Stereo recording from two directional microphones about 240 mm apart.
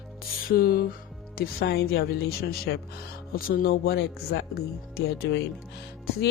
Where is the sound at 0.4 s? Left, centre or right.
Left.